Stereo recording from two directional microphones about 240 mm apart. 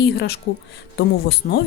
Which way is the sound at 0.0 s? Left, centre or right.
Left.